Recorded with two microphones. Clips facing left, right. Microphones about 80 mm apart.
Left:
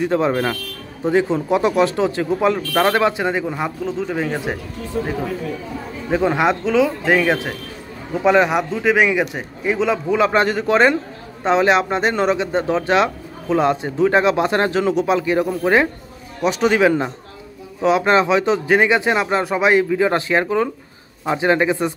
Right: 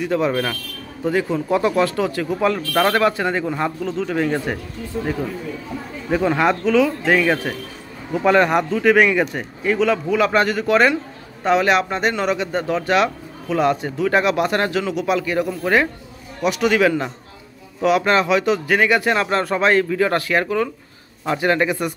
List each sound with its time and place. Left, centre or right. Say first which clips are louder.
0.0 s a man's voice: left 2 dB; left; by 4.6 s centre
6.1 s a man's voice: left 1 dB; centre